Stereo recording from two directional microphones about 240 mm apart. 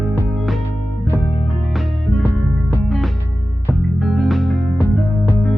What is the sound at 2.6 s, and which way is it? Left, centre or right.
Music, centre.